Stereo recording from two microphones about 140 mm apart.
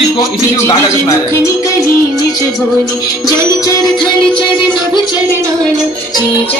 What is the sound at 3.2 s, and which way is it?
Music, 30° left (ahead or behind).